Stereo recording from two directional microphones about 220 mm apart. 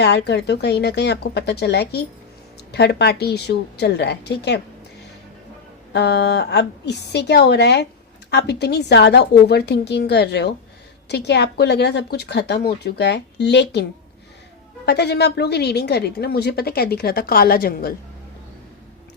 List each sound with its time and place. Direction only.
0.0 s a woman's voice: 50° left (ahead or behind)
5.9 s a woman's voice: 50° left (ahead or behind)
14.8 s a woman's voice: 50° left (ahead or behind)